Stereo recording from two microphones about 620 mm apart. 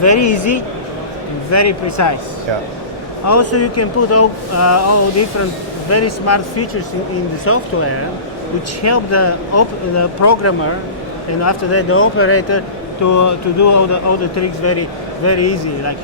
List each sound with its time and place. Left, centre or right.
0.0 s speech: left
3.2 s speech: left